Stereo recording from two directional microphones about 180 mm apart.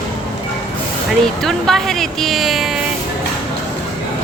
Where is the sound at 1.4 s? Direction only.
Centre (ahead or behind).